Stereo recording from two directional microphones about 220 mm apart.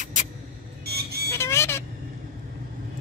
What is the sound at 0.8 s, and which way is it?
Vehicle, 45° right (ahead or behind).